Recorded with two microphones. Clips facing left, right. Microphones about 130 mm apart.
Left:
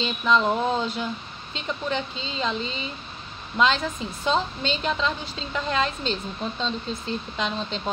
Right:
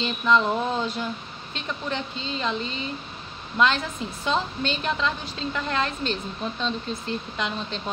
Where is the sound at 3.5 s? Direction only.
20° left (ahead or behind).